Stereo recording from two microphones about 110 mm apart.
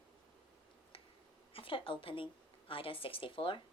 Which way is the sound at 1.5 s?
55° left (ahead or behind).